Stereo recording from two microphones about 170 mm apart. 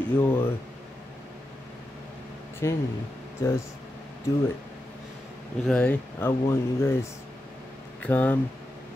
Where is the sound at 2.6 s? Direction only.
15° left (ahead or behind).